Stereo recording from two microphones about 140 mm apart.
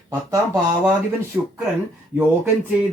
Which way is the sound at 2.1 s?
15° right (ahead or behind).